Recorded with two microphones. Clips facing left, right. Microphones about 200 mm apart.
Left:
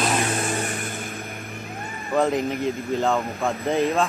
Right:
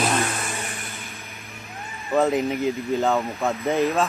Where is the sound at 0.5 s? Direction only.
50° left (ahead or behind).